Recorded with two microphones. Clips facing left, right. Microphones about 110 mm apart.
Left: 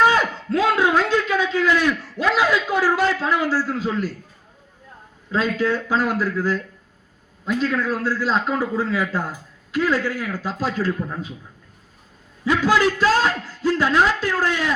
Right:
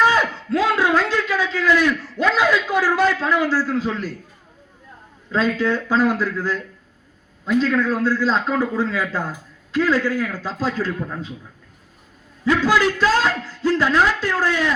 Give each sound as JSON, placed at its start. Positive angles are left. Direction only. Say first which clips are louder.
{"t": 0.0, "sound": "a man's voice", "louder": "even", "side_deg": 20}
{"t": 5.3, "sound": "a man's voice", "louder": "right 1 dB", "side_deg": 10}
{"t": 12.5, "sound": "a man's voice", "louder": "right 1 dB", "side_deg": 15}